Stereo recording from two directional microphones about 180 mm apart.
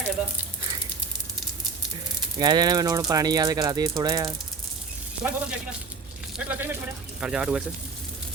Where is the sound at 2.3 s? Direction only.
20° right (ahead or behind).